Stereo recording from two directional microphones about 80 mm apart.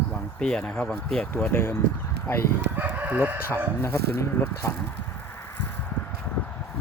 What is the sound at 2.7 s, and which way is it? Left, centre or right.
Chicken, right.